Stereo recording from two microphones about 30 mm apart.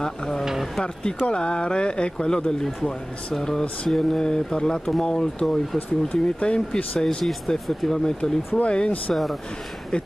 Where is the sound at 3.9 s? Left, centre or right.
Centre.